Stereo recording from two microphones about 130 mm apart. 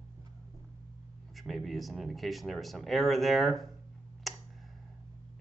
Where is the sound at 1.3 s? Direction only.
Centre (ahead or behind).